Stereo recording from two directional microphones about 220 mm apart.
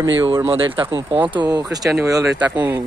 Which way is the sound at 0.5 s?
25° right (ahead or behind).